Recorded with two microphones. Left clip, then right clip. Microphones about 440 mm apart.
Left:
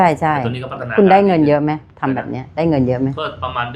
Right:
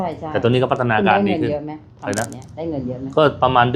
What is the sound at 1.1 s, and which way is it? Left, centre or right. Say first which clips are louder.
Speech: left 7 dB; left.